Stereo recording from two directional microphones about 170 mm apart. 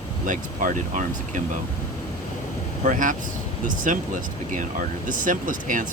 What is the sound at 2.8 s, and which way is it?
Speech, 50° right (ahead or behind).